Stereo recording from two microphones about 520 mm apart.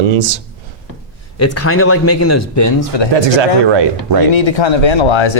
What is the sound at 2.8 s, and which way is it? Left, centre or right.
Speech, left.